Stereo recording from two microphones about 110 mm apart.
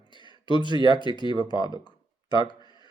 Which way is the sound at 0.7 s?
45° right (ahead or behind).